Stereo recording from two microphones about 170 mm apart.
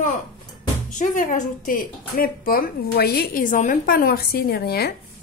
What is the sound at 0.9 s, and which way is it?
A woman's voice, 50° left (ahead or behind).